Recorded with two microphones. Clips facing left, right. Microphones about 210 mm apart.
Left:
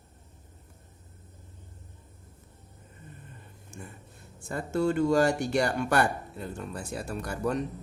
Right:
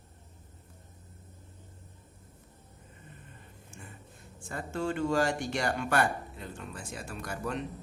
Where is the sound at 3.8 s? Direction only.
45° left (ahead or behind).